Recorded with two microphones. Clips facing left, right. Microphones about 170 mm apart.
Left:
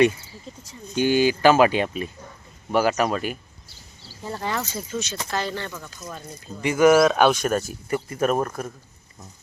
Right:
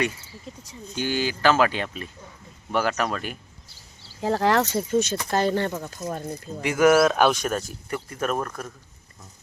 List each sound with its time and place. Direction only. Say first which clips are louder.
0.9 s speech: left 7 dB; 15° left (ahead or behind)
4.2 s speech: right 8 dB; 90° right; by 6.2 s 50° right (ahead or behind)
6.6 s speech: left 2 dB; centre (ahead or behind)